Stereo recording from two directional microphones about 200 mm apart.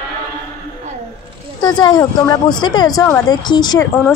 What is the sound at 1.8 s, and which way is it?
Speech, 20° left (ahead or behind).